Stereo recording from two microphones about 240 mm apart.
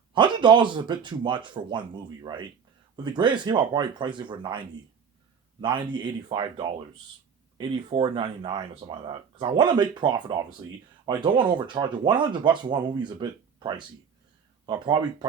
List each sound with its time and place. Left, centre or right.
0.1 s speech: centre